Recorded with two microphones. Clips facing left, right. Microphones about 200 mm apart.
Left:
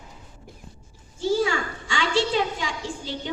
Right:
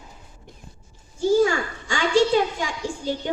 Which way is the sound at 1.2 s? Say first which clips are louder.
Right 4 dB; 45° right (ahead or behind).